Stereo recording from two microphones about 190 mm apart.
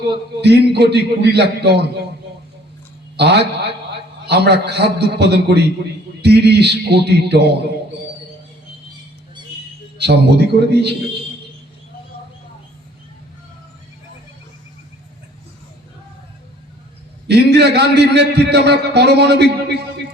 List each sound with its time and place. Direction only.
0.4 s a man's voice: 60° right (ahead or behind)
3.2 s a man's voice: 60° right (ahead or behind)
10.0 s a man's voice: 60° right (ahead or behind)
17.2 s a man's voice: 60° right (ahead or behind)